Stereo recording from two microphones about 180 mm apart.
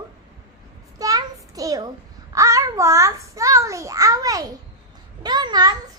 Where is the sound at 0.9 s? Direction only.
20° right (ahead or behind).